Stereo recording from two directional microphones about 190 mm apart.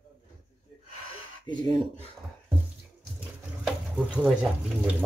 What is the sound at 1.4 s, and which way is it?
Speech, 25° left (ahead or behind).